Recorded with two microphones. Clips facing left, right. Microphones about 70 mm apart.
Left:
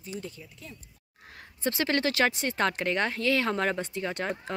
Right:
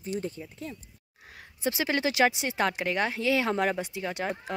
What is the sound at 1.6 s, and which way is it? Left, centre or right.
Speech, centre.